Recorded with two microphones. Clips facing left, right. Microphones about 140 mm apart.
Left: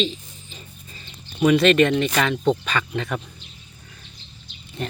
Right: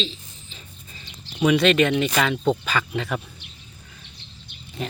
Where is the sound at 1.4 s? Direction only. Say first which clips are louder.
Left 2 dB; centre (ahead or behind).